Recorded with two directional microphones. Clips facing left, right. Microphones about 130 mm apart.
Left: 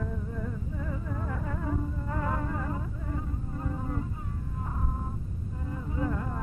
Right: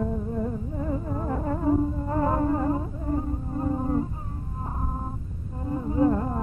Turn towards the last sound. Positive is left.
turn(degrees=-35)  # may be behind; listen again after turning